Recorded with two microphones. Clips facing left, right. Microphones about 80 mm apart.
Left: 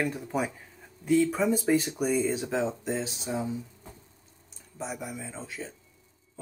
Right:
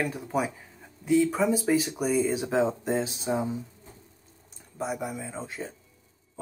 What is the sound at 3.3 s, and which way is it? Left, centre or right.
Speech, right.